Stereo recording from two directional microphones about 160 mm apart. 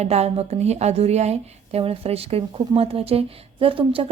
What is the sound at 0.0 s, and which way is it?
Speech, 40° right (ahead or behind).